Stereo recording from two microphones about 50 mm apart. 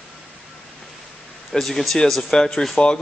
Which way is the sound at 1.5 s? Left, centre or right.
Centre.